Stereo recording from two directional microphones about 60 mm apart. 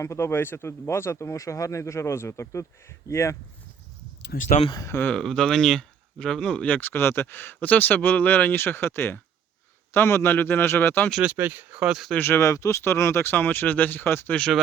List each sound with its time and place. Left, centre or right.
0.0 s speech: left
5.1 s speech: centre
6.7 s speech: left
11.2 s speech: right
11.8 s speech: centre
12.2 s speech: left
13.3 s speech: left
14.3 s speech: centre